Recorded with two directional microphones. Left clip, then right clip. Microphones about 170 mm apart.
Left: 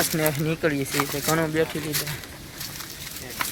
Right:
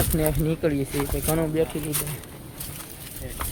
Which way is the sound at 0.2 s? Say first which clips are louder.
Left 1 dB; 5° right (ahead or behind).